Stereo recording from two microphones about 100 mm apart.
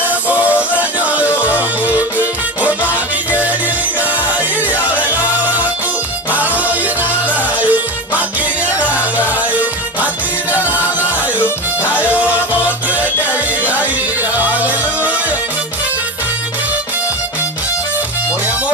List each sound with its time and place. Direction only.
0.0 s music: 15° right (ahead or behind)